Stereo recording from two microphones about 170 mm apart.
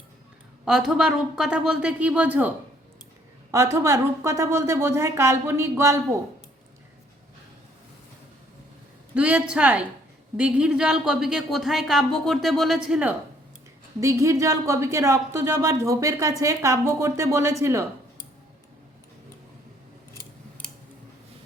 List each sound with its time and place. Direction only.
0.6 s speech: 5° right (ahead or behind)
3.5 s speech: 15° right (ahead or behind)
9.1 s speech: 5° right (ahead or behind)
14.0 s speech: 15° right (ahead or behind)
20.6 s scissors: 5° left (ahead or behind)